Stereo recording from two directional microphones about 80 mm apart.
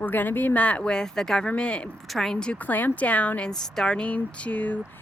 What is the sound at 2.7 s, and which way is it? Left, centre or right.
Speech, left.